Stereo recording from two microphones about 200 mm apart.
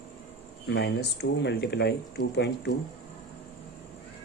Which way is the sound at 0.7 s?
55° left (ahead or behind).